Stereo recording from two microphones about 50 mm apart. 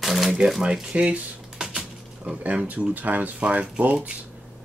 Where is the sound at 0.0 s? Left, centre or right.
Centre.